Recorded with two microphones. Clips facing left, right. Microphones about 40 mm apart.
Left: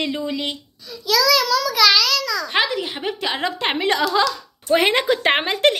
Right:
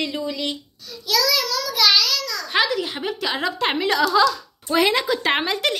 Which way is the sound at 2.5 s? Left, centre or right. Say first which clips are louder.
Right 3 dB; left.